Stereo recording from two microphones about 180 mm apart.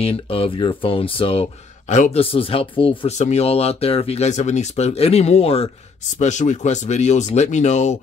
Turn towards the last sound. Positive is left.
turn(degrees=40)  # may be behind; listen again after turning